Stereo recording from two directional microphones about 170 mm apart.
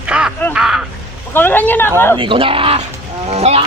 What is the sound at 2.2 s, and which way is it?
Speech, 30° right (ahead or behind).